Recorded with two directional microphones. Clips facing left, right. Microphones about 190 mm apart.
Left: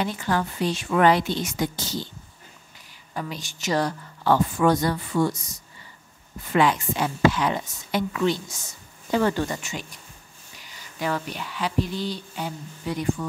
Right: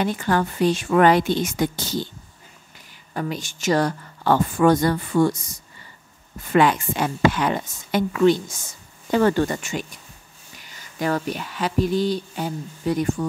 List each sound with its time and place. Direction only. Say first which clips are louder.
0.0 s speech: right 4 dB; 55° right (ahead or behind)
3.2 s speech: right 5 dB; 50° right (ahead or behind)
6.5 s speech: right 3 dB; 55° right (ahead or behind)
11.0 s speech: right 4 dB; 45° right (ahead or behind)